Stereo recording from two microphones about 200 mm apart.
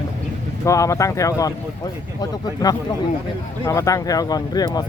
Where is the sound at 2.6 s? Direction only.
20° left (ahead or behind).